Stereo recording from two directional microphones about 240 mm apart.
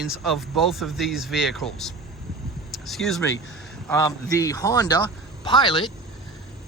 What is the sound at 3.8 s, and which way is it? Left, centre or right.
A man's voice, centre.